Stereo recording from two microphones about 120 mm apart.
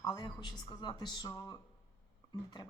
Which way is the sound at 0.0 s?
35° left (ahead or behind).